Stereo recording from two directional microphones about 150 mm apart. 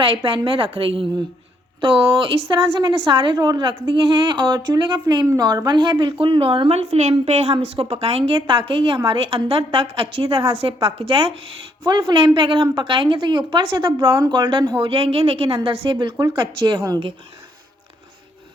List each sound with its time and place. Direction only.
0.0 s speech: 35° right (ahead or behind)